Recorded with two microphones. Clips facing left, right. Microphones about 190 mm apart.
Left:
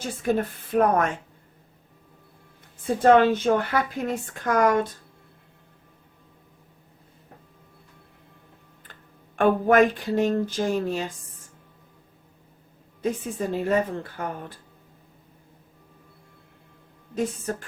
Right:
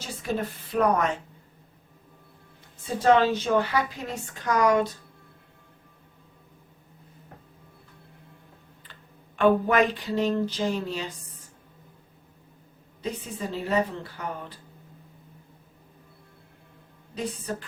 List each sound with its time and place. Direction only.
0.0 s a woman's voice: 50° left (ahead or behind)
2.8 s a woman's voice: 50° left (ahead or behind)
8.9 s a sound: 50° left (ahead or behind)
13.0 s a woman's voice: 50° left (ahead or behind)
17.2 s a woman's voice: 50° left (ahead or behind)